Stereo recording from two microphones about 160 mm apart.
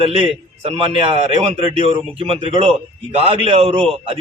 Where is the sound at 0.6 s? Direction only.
35° right (ahead or behind).